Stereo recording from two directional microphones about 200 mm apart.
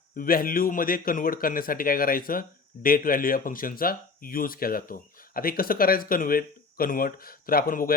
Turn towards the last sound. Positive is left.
turn(degrees=45)  # may be behind; listen again after turning